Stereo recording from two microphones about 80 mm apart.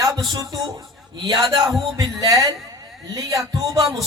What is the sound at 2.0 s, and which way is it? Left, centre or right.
A man's voice, right.